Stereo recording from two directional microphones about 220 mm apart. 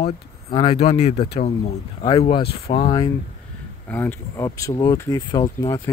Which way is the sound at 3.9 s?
10° left (ahead or behind).